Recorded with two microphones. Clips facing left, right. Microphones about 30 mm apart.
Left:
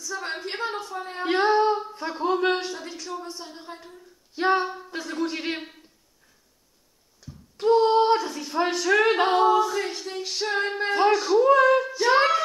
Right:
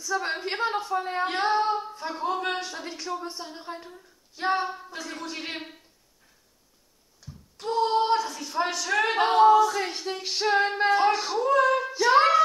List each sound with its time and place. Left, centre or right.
0.0 s a sound: centre
1.4 s female singing: centre
2.0 s a sound: centre
2.7 s speech: centre
4.4 s female singing: left
4.6 s female singing: centre
5.2 s female singing: left
7.2 s a sound: centre
7.6 s a sound: centre
7.9 s speech: left
8.8 s female singing: centre
9.8 s speech: centre
11.4 s speech: centre
12.0 s child singing: centre